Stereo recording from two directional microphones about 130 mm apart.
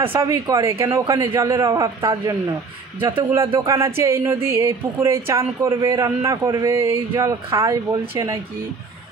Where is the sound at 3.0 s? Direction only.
40° right (ahead or behind).